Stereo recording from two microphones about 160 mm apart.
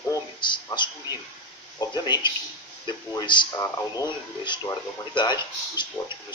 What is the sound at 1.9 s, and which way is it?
Speech, 30° left (ahead or behind).